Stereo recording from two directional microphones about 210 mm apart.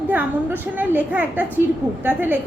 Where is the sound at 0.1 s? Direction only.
5° right (ahead or behind).